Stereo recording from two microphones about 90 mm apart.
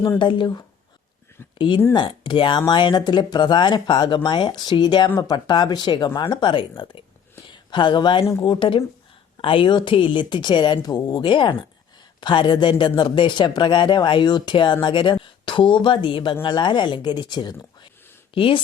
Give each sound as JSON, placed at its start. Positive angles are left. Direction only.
{"t": 0.2, "sound": "speech", "side_deg": 65}
{"t": 1.5, "sound": "speech", "side_deg": 65}
{"t": 1.9, "sound": "speech", "side_deg": 55}
{"t": 18.3, "sound": "speech", "side_deg": 80}